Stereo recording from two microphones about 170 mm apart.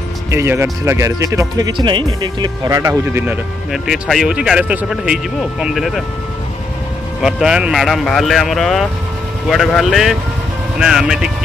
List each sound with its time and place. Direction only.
0.3 s speech: 15° right (ahead or behind)
3.7 s speech: centre (ahead or behind)
7.2 s speech: centre (ahead or behind)